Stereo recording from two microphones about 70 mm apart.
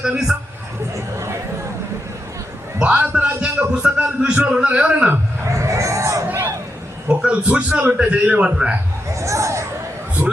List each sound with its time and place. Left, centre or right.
0.0 s speech: centre
0.9 s a sound: right
2.7 s a man's voice: centre
5.5 s a sound: right
7.1 s speech: centre
9.2 s speech: right